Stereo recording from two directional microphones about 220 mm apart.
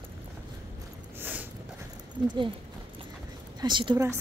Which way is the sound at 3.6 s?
20° right (ahead or behind).